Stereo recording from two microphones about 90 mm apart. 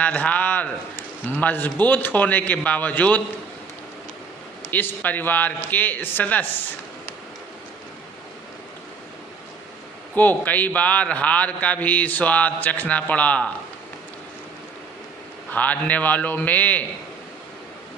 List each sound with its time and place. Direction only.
0.0 s a man's voice: 15° left (ahead or behind)
4.7 s a man's voice: 20° left (ahead or behind)
10.2 s a man's voice: 20° left (ahead or behind)
15.5 s a man's voice: 15° left (ahead or behind)